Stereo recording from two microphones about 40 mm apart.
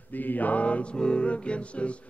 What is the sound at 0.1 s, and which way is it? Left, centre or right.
Mantra, left.